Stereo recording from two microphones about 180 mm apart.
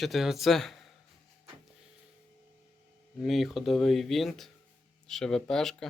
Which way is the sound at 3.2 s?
Centre (ahead or behind).